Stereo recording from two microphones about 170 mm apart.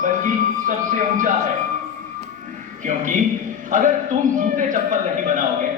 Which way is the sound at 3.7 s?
50° right (ahead or behind).